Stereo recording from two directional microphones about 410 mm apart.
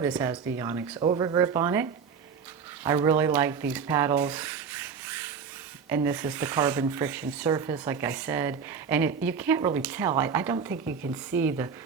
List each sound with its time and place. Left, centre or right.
0.0 s speech: centre
10.8 s speech: right
11.3 s speech: centre